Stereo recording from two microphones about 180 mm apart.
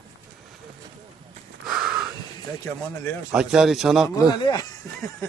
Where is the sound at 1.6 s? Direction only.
5° right (ahead or behind).